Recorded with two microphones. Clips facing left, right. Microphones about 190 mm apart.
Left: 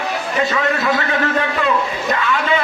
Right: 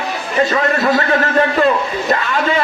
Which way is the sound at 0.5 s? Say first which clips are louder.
Right 3 dB; 40° right (ahead or behind).